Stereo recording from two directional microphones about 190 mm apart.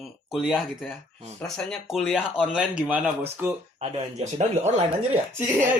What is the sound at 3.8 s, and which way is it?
Speech, 35° right (ahead or behind).